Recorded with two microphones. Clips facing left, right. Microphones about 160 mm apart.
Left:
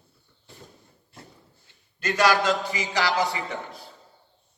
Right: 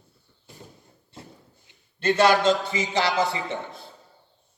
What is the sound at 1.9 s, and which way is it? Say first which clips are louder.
A man's voice: right 3 dB; 25° right (ahead or behind).